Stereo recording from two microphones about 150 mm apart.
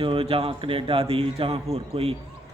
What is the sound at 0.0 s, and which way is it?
A man's voice, 35° right (ahead or behind).